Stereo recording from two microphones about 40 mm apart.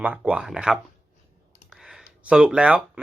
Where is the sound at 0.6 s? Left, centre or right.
Right.